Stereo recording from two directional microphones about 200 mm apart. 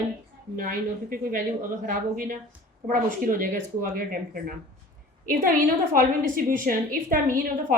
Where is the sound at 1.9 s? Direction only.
45° right (ahead or behind).